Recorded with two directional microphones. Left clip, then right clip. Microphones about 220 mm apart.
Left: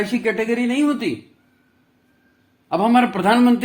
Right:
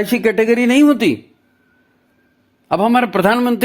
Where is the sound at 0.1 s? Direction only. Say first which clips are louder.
Right 7 dB; 45° right (ahead or behind).